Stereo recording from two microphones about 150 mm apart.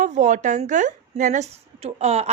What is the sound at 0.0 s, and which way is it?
A woman's voice, 55° right (ahead or behind).